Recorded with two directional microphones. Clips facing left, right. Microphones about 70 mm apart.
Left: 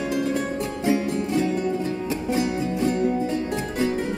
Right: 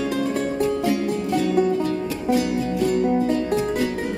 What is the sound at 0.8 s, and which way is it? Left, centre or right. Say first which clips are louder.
Music: right 1 dB; left.